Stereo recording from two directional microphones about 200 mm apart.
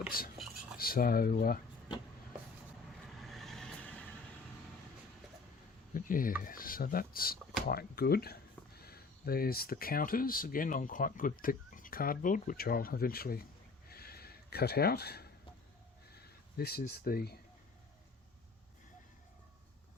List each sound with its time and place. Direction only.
0.1 s speech: 45° left (ahead or behind)
3.1 s vehicle: centre (ahead or behind)
5.9 s a sound: 45° left (ahead or behind)
6.4 s speech: 45° left (ahead or behind)
13.9 s a sound: 50° left (ahead or behind)
17.0 s speech: 50° left (ahead or behind)